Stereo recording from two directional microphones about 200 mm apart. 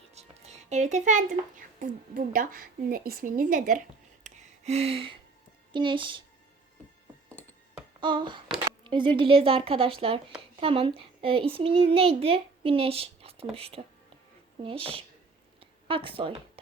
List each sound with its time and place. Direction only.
0.1 s music: 35° right (ahead or behind)
1.5 s a woman's voice: 45° right (ahead or behind)
4.2 s a sound: 35° right (ahead or behind)
5.7 s a child's voice: 25° right (ahead or behind)
8.0 s a child's voice: 25° right (ahead or behind)